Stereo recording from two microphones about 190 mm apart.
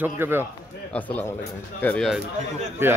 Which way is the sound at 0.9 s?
10° left (ahead or behind).